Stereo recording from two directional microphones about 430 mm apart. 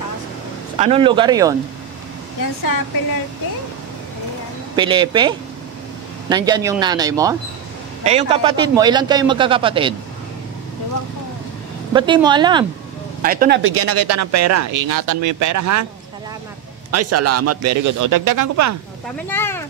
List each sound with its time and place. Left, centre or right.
0.7 s a man's voice: centre
4.7 s a man's voice: centre
11.9 s a man's voice: centre; by 15.9 s right
16.9 s speech: right
19.2 s speech: centre